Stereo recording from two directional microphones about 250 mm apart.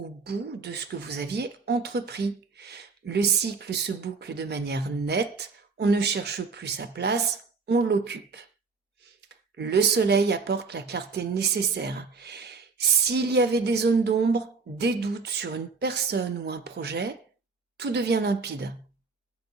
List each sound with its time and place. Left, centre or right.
0.3 s speech: right